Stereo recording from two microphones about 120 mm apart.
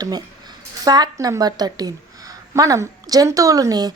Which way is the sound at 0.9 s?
35° right (ahead or behind).